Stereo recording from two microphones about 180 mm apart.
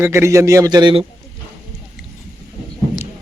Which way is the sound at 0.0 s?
15° right (ahead or behind).